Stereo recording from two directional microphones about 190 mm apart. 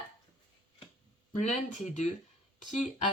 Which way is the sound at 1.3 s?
40° left (ahead or behind).